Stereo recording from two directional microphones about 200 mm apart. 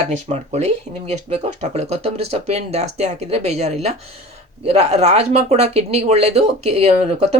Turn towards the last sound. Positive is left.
turn(degrees=-30)  # may be behind; listen again after turning